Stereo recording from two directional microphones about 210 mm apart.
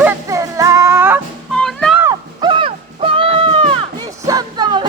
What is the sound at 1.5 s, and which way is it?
Music, 5° left (ahead or behind).